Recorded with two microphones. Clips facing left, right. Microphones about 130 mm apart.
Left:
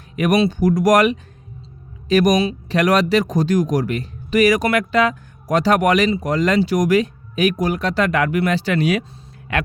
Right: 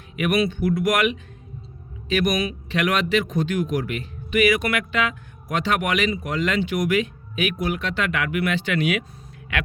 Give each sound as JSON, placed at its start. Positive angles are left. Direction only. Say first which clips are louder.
{"t": 0.2, "sound": "speech", "louder": "left 5 dB", "side_deg": 35}